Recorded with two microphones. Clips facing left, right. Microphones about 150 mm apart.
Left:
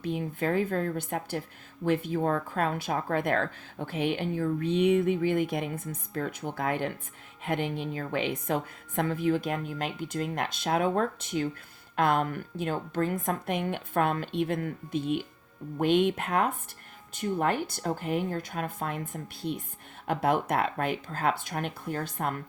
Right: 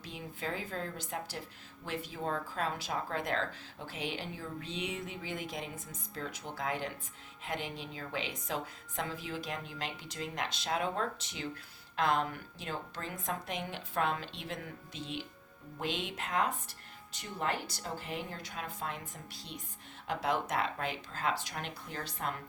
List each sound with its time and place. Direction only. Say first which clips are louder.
0.0 s a woman's voice: left 11 dB; 55° left (ahead or behind)